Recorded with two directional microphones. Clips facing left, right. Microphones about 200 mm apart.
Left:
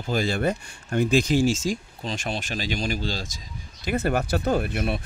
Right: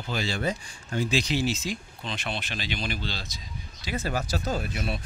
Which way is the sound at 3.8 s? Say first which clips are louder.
Left 6 dB; 55° left (ahead or behind).